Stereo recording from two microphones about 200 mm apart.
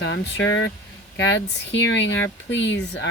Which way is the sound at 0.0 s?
65° left (ahead or behind).